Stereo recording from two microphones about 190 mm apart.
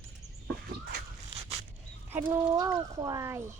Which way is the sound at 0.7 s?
55° right (ahead or behind).